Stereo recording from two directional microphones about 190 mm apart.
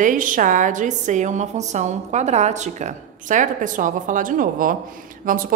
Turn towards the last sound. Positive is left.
turn(degrees=-45)  # may be behind; listen again after turning